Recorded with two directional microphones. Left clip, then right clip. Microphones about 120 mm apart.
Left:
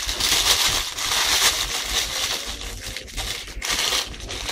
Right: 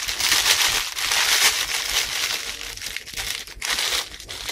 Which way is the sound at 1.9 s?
Centre (ahead or behind).